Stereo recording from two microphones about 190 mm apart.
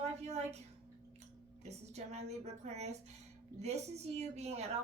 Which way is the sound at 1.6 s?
35° right (ahead or behind).